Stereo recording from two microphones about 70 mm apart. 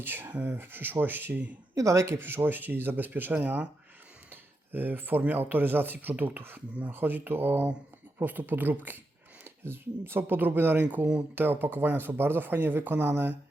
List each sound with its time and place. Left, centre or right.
0.0 s speech: right
1.7 s speech: right